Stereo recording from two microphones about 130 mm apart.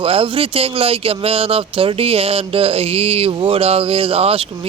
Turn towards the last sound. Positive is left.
turn(degrees=-50)  # may be behind; listen again after turning